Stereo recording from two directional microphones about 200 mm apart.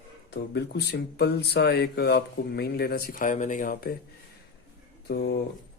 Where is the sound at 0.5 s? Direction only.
55° left (ahead or behind).